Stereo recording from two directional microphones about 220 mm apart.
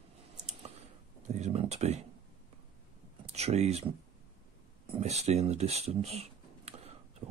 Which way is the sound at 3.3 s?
30° right (ahead or behind).